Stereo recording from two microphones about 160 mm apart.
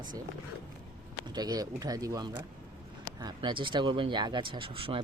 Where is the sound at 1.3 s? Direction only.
25° right (ahead or behind).